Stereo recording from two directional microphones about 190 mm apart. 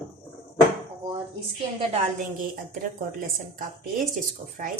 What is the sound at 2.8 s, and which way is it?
Speech, 45° right (ahead or behind).